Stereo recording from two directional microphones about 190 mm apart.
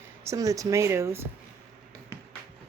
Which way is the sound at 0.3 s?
20° right (ahead or behind).